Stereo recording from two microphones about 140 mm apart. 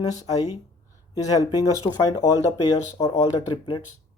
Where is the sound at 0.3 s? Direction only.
25° left (ahead or behind).